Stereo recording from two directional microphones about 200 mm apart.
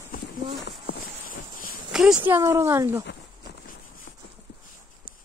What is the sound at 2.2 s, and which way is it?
Speech, 10° right (ahead or behind).